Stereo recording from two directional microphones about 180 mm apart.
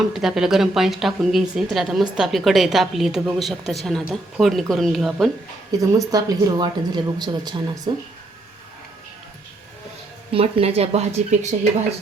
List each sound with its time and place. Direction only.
0.1 s a woman's voice: centre (ahead or behind)
6.1 s speech: 20° right (ahead or behind)
10.3 s speech: 35° right (ahead or behind)